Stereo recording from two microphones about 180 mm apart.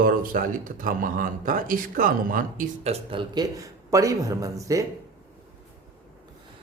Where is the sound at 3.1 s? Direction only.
25° right (ahead or behind).